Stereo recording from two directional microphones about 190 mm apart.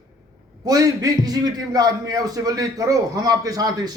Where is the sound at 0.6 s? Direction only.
20° right (ahead or behind).